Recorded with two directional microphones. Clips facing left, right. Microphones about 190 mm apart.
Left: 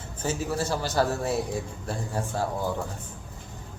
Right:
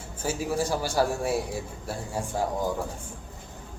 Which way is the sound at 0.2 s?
10° right (ahead or behind).